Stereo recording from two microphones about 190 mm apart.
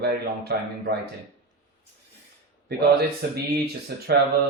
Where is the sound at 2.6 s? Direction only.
55° right (ahead or behind).